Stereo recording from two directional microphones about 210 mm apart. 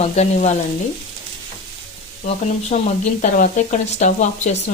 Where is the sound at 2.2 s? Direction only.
35° left (ahead or behind).